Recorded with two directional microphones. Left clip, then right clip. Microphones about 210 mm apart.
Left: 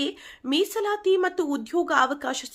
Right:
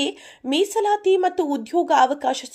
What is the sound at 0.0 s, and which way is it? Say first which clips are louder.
A woman's voice: right 4 dB; centre (ahead or behind).